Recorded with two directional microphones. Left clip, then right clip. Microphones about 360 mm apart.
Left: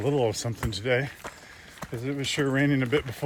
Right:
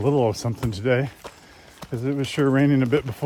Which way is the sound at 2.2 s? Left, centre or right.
Right.